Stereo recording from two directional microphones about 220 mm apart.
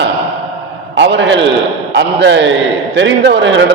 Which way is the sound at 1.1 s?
55° right (ahead or behind).